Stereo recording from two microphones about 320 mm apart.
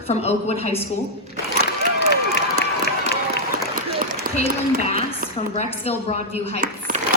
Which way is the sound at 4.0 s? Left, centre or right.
Right.